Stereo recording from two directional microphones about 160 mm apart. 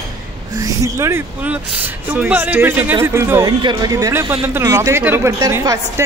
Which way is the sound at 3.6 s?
25° right (ahead or behind).